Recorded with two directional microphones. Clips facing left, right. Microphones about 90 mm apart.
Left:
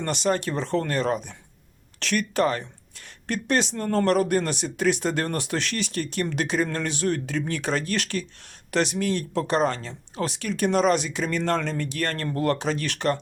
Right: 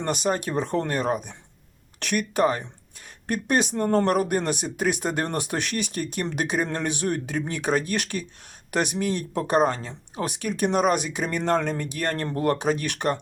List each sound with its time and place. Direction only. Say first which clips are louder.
0.0 s speech: left 1 dB; 10° right (ahead or behind)
3.8 s speech: even; 20° right (ahead or behind)
12.5 s speech: right 2 dB; 15° right (ahead or behind)